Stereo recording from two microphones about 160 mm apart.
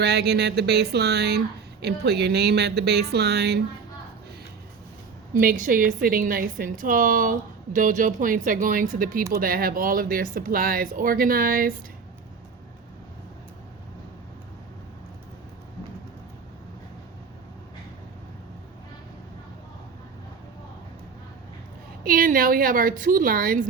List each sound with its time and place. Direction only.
0.0 s speech: 90° right
5.3 s a woman's voice: 60° right (ahead or behind)
22.0 s a woman's voice: 60° right (ahead or behind)